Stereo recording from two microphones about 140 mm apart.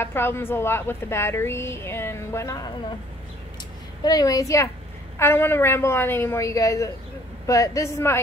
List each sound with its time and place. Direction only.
0.0 s a woman's voice: 15° left (ahead or behind)
4.0 s a man's voice: 25° left (ahead or behind)